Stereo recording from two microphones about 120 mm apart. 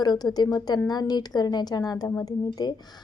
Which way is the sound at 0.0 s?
35° left (ahead or behind).